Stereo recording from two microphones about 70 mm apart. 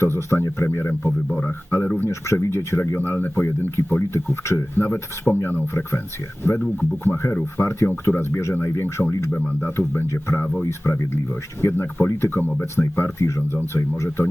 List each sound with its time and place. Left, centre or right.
0.0 s speech: left
2.0 s speech: left
7.0 s speech: left